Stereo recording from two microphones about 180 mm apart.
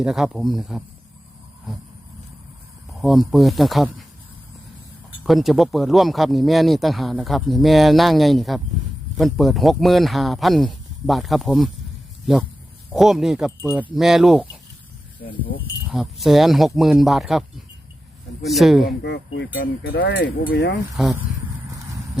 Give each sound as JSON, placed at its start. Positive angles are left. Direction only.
{"t": 0.0, "sound": "speech", "side_deg": -5}
{"t": 3.0, "sound": "speech", "side_deg": 0}
{"t": 5.2, "sound": "speech", "side_deg": 0}
{"t": 15.9, "sound": "speech", "side_deg": 0}
{"t": 18.4, "sound": "speech", "side_deg": 0}
{"t": 18.9, "sound": "speech", "side_deg": 70}
{"t": 19.5, "sound": "speech", "side_deg": 60}
{"t": 21.0, "sound": "speech", "side_deg": -5}